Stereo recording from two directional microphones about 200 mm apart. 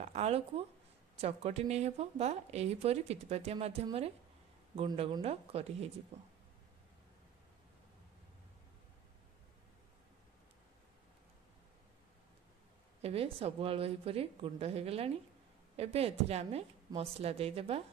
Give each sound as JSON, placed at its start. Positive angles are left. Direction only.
{"t": 0.0, "sound": "a woman's voice", "side_deg": -35}
{"t": 13.0, "sound": "a woman's voice", "side_deg": -30}